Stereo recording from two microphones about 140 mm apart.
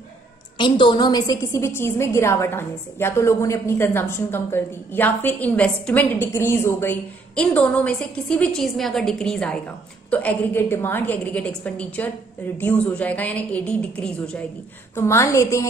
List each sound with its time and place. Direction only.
0.6 s a woman's voice: 35° left (ahead or behind); by 14.4 s 5° left (ahead or behind)
15.0 s a woman's voice: 20° left (ahead or behind)